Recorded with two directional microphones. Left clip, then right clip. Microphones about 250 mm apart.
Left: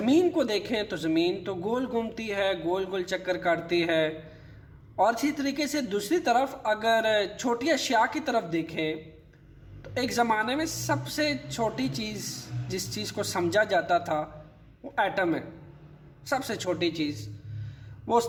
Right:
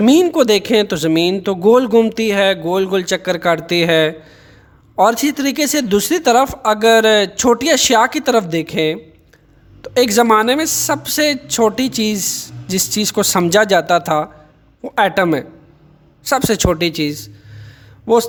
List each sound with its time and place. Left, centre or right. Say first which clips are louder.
0.0 s a woman's voice: right 12 dB; right